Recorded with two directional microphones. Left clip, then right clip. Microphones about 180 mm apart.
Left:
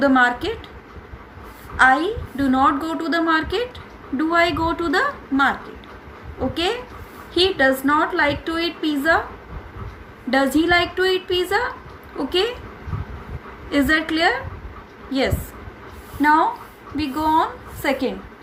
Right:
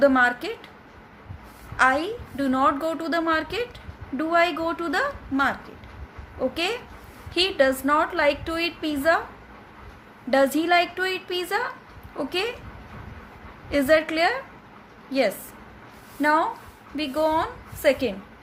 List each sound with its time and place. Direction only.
0.0 s a woman's voice: 25° right (ahead or behind)
1.7 s a woman's voice: 25° right (ahead or behind)
7.3 s a woman's voice: 30° right (ahead or behind)
10.2 s a woman's voice: 25° right (ahead or behind)
13.7 s a woman's voice: 25° right (ahead or behind)
16.2 s a woman's voice: 35° right (ahead or behind)